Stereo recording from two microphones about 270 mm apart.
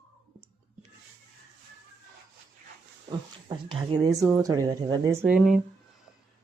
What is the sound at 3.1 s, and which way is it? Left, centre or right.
A woman's voice, centre.